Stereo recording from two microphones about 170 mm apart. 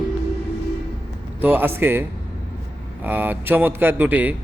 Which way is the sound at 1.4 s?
10° right (ahead or behind).